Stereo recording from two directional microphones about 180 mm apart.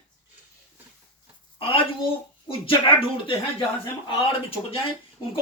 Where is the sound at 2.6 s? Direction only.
30° left (ahead or behind).